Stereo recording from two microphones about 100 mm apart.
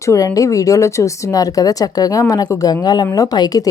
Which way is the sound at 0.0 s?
30° left (ahead or behind).